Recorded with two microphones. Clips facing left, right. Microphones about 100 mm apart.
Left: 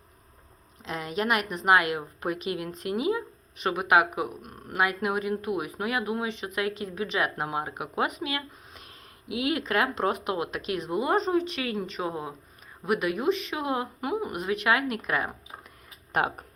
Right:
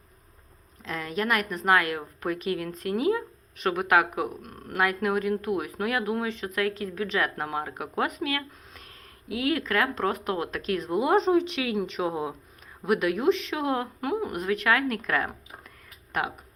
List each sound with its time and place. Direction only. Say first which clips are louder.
0.9 s a woman's voice: even; 20° left (ahead or behind); by 6.2 s 5° left (ahead or behind)
6.2 s a woman's voice: right 2 dB; 15° left (ahead or behind)
10.9 s a woman's voice: right 3 dB; centre (ahead or behind)
14.4 s a woman's voice: right 1 dB; 15° left (ahead or behind)
16.1 s speech: left 3 dB; 30° left (ahead or behind)